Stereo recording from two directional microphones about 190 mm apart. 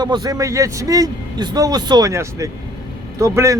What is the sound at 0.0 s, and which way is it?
A man's voice, 20° right (ahead or behind).